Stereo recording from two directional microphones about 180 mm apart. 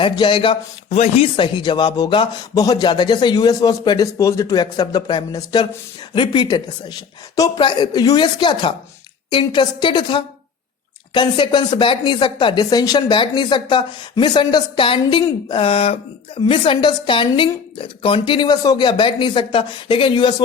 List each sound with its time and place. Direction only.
0.0 s speech: 30° left (ahead or behind)